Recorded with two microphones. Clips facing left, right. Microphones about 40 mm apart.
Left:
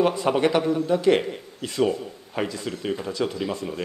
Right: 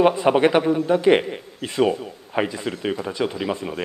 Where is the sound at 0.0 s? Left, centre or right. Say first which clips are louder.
Right 4 dB; right.